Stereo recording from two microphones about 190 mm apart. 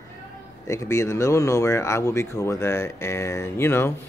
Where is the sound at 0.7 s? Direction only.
15° left (ahead or behind).